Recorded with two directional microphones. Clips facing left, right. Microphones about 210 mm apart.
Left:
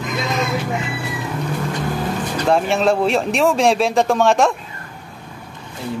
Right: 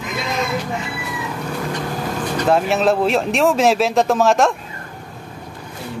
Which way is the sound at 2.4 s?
Centre (ahead or behind).